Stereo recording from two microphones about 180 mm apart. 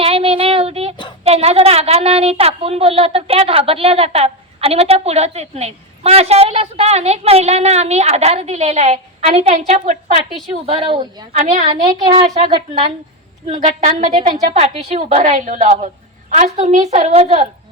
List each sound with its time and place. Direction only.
0.0 s a sound: 30° right (ahead or behind)
1.2 s a woman's voice: 35° right (ahead or behind)
10.7 s speech: 30° right (ahead or behind)
11.3 s a woman's voice: 40° right (ahead or behind)
12.0 s a woman's voice: 30° right (ahead or behind)